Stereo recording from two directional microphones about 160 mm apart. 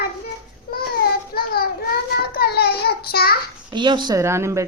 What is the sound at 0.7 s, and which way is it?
Child singing, 65° left (ahead or behind).